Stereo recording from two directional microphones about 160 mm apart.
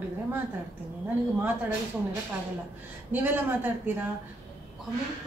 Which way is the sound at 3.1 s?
10° right (ahead or behind).